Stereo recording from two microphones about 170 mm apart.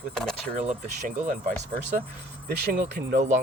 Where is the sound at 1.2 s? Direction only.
55° right (ahead or behind).